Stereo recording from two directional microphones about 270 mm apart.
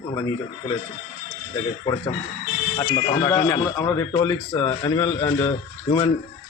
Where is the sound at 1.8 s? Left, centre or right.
Centre.